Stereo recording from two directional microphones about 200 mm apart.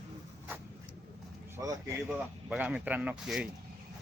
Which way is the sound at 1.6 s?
15° right (ahead or behind).